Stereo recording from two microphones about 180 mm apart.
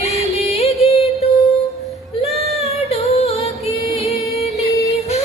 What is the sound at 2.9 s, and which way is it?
Music, 35° left (ahead or behind).